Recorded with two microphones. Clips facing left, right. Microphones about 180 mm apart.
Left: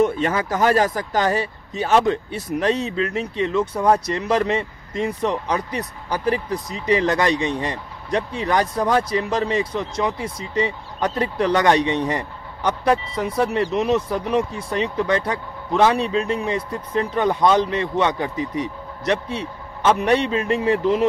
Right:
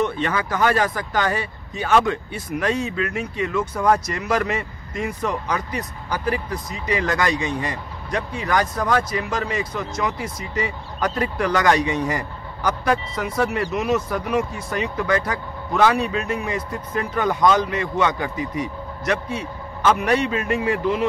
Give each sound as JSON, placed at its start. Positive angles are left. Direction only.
{"t": 0.0, "sound": "speech", "side_deg": 40}